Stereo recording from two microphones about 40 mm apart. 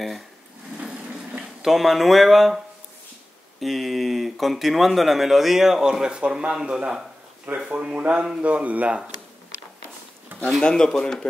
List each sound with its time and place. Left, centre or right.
1.6 s speech: centre
7.6 s speech: right
10.6 s speech: centre